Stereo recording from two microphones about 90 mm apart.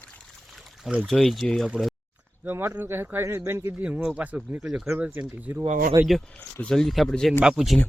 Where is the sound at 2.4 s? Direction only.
25° right (ahead or behind).